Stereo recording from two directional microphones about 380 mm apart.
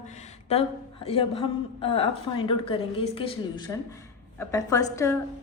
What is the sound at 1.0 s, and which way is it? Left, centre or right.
A woman's voice, centre.